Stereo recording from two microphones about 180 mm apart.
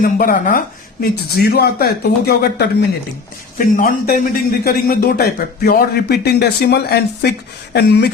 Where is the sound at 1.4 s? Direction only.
65° left (ahead or behind).